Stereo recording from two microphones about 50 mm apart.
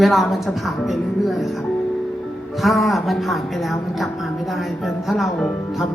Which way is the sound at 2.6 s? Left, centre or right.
Centre.